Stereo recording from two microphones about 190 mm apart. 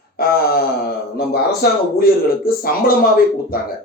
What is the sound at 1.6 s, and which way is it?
A man's voice, 55° left (ahead or behind).